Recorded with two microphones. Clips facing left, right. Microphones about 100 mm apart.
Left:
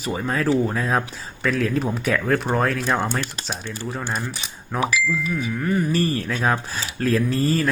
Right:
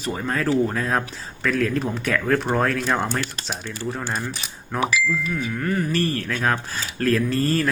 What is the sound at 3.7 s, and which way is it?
Speech, 20° left (ahead or behind).